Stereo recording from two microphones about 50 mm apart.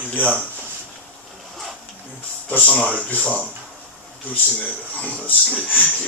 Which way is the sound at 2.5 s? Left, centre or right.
Left.